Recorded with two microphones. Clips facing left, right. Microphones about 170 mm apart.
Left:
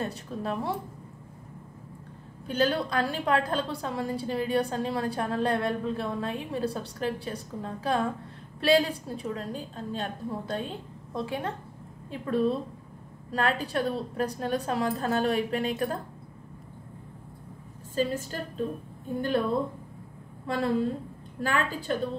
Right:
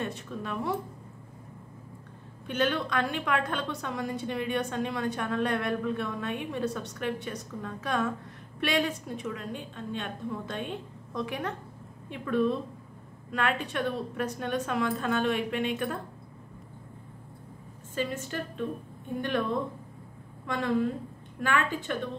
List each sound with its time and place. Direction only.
0.0 s a woman's voice: 35° left (ahead or behind)
2.4 s a woman's voice: 35° left (ahead or behind)
17.9 s a woman's voice: 35° left (ahead or behind)
21.4 s a woman's voice: 35° left (ahead or behind)